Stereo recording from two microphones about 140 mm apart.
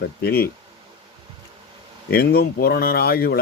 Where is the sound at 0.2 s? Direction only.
90° left.